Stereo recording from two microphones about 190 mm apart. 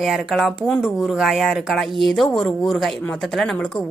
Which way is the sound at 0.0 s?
Centre (ahead or behind).